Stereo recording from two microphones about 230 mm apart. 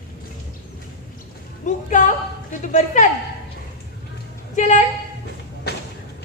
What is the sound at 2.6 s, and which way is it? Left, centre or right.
Speech, left.